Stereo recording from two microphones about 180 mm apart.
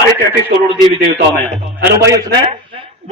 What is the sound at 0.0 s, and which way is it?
Speech, 60° right (ahead or behind).